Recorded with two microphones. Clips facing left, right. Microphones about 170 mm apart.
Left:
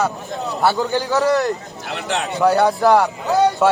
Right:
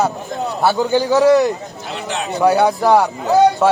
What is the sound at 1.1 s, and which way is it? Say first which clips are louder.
Speech: right 6 dB; 10° right (ahead or behind).